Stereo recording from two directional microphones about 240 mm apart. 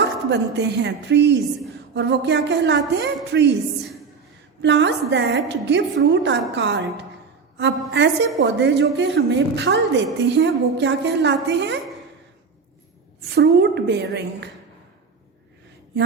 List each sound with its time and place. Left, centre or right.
0.0 s a woman's voice: right
4.6 s a woman's voice: right
13.3 s a woman's voice: right